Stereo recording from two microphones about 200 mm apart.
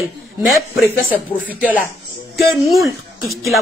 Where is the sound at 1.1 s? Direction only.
45° left (ahead or behind).